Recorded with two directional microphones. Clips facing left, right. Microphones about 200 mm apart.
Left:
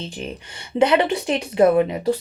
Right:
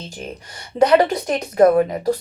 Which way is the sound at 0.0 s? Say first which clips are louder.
Left 2 dB; 40° right (ahead or behind).